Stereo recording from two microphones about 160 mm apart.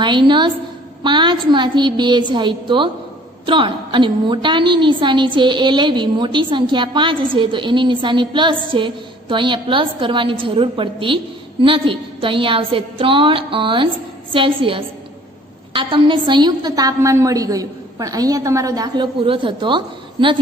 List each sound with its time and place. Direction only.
0.0 s a woman's voice: 30° right (ahead or behind)